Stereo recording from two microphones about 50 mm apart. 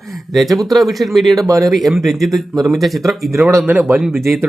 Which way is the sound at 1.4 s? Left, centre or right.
Right.